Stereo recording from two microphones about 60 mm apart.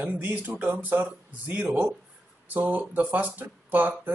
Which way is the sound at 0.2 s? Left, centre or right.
Right.